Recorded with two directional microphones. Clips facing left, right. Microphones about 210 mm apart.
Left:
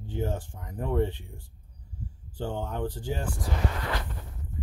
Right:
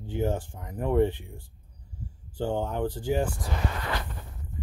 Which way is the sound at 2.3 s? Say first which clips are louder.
Right 4 dB; 15° right (ahead or behind).